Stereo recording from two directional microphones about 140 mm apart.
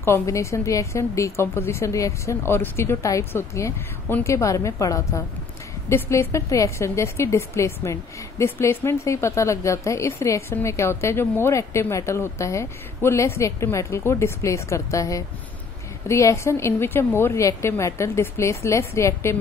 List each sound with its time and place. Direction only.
0.0 s a woman's voice: 20° left (ahead or behind)